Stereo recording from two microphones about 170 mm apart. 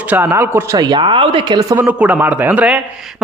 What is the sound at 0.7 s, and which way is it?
Speech, 25° right (ahead or behind).